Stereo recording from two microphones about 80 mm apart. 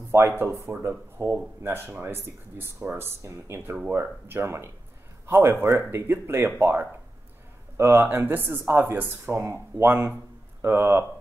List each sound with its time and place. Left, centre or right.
0.1 s speech: right
3.2 s speech: right